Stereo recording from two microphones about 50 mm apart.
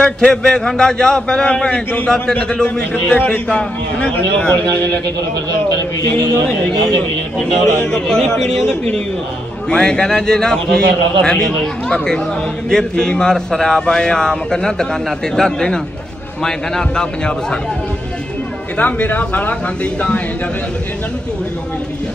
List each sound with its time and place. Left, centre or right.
0.0 s a man's voice: centre
6.4 s a man's voice: centre
18.8 s speech: left